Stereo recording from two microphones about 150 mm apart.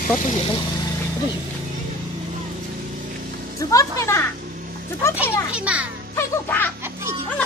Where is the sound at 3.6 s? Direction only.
20° left (ahead or behind).